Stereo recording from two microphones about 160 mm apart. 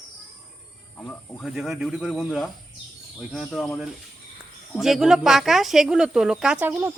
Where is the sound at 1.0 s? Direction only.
5° left (ahead or behind).